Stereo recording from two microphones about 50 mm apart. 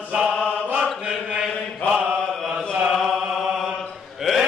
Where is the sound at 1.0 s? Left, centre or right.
Centre.